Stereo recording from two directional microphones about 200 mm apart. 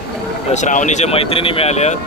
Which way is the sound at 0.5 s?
40° left (ahead or behind).